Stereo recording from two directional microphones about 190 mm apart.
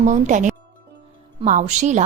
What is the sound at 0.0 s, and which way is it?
A woman's voice, 40° right (ahead or behind).